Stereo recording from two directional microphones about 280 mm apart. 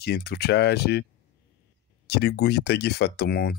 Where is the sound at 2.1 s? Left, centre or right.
Left.